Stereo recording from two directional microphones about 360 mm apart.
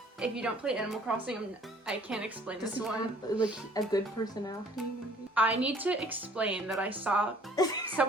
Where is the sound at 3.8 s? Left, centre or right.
Centre.